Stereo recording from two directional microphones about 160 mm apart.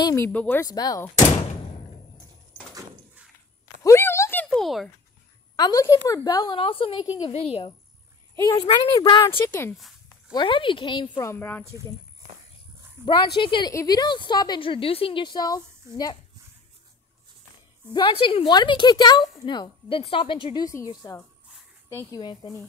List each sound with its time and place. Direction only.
0.1 s speech: 10° left (ahead or behind)
0.7 s a woman's voice: 25° left (ahead or behind)
3.8 s a sound: 15° left (ahead or behind); by 4.8 s centre (ahead or behind)
5.6 s a woman's voice: 20° left (ahead or behind)
9.5 s speech: 15° left (ahead or behind)
9.8 s a sound: centre (ahead or behind)
10.3 s a woman's voice: 30° left (ahead or behind)
11.2 s speech: 10° left (ahead or behind)
13.0 s a woman's voice: 30° left (ahead or behind)
17.9 s a woman's voice: 30° left (ahead or behind)
20.6 s a woman's voice: 20° left (ahead or behind)